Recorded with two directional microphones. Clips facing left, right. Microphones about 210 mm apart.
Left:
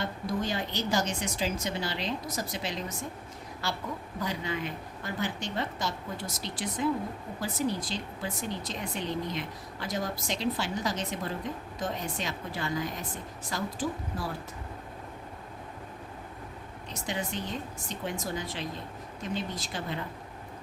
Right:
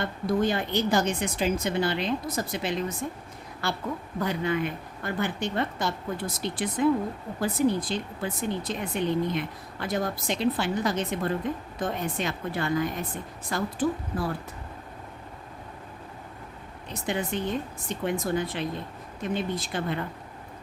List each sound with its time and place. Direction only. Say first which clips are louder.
0.0 s speech: right 6 dB; 55° right (ahead or behind)
16.9 s speech: right 5 dB; 55° right (ahead or behind)